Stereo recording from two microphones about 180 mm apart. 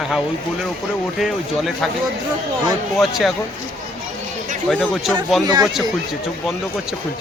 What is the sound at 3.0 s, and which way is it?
Speech, centre (ahead or behind).